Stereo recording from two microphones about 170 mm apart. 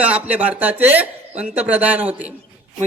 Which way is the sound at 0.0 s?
10° right (ahead or behind).